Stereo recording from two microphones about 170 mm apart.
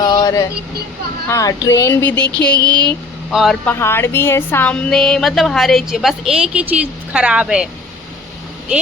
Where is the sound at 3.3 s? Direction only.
Centre (ahead or behind).